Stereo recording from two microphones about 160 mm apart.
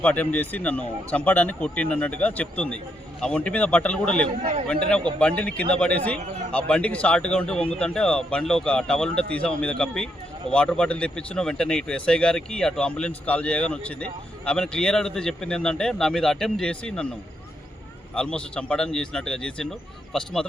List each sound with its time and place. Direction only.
0.0 s a man's voice: 10° left (ahead or behind)
18.1 s speech: 5° left (ahead or behind)